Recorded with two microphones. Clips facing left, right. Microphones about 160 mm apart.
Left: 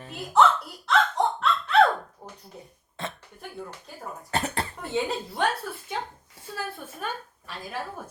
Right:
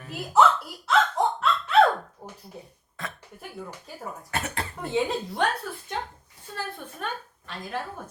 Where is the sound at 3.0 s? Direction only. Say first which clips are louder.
Left 3 dB; 25° left (ahead or behind).